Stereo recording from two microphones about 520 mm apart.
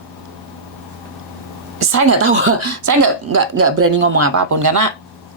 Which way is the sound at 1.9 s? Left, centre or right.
Right.